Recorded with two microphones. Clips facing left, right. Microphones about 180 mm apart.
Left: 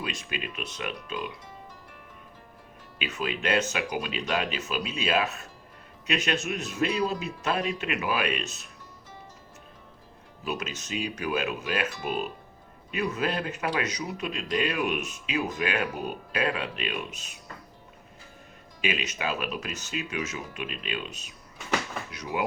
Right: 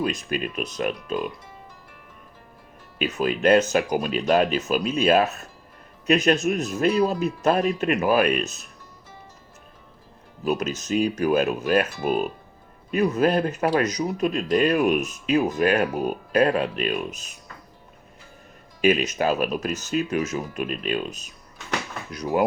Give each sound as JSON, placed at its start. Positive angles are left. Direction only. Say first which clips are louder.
{"t": 0.0, "sound": "speech", "louder": "right 9 dB", "side_deg": -40}
{"t": 3.0, "sound": "speech", "louder": "right 9 dB", "side_deg": -45}
{"t": 10.4, "sound": "speech", "louder": "right 8 dB", "side_deg": -40}
{"t": 18.8, "sound": "speech", "louder": "right 10 dB", "side_deg": -40}